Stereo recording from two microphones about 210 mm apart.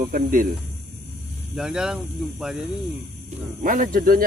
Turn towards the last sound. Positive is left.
turn(degrees=-40)  # may be behind; listen again after turning